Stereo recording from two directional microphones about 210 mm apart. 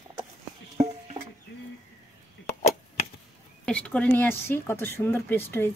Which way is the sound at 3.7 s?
5° left (ahead or behind).